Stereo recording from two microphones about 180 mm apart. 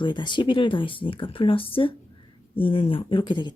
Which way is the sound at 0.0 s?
25° left (ahead or behind).